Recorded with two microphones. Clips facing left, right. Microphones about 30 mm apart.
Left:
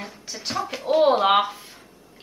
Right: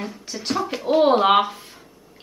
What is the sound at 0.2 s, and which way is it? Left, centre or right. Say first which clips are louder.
Speech: right 3 dB; centre.